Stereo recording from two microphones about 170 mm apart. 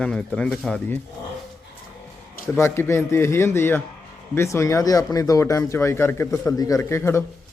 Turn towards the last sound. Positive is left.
turn(degrees=15)  # may be behind; listen again after turning